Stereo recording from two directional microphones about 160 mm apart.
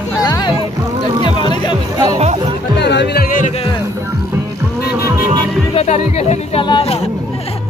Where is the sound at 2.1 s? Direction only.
40° right (ahead or behind).